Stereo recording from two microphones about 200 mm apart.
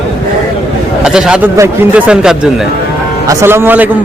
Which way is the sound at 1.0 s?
5° right (ahead or behind).